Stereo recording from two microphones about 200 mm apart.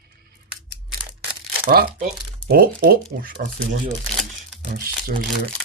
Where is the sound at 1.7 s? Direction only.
50° right (ahead or behind).